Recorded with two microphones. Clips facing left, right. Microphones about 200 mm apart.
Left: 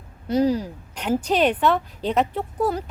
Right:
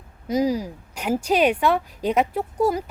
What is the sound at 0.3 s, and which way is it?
Speech, 10° right (ahead or behind).